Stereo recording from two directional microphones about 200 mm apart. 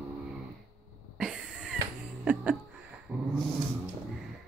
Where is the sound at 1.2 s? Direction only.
5° right (ahead or behind).